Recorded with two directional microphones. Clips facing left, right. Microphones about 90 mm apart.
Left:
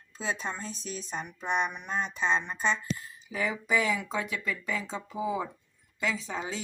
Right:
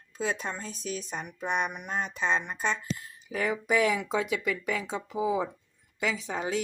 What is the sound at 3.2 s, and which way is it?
Speech, 55° right (ahead or behind).